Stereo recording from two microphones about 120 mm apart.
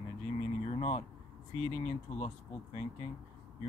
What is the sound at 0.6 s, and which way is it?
Speech, 60° left (ahead or behind).